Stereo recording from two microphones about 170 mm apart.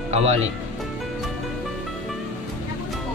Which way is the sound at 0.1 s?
40° right (ahead or behind).